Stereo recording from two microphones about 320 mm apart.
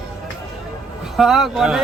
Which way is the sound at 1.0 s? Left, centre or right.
Centre.